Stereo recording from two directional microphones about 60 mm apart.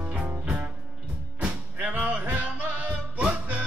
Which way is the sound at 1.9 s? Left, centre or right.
Right.